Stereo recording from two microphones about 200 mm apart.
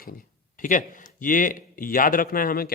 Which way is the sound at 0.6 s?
40° left (ahead or behind).